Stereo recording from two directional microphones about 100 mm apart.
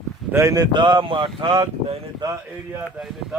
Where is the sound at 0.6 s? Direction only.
50° right (ahead or behind).